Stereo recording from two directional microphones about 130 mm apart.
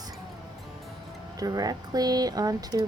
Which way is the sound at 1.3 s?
30° right (ahead or behind).